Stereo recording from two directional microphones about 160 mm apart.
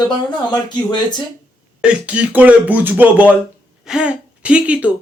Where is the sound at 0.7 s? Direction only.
30° left (ahead or behind).